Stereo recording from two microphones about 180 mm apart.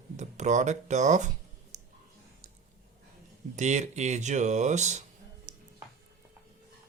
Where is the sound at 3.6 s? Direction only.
40° right (ahead or behind).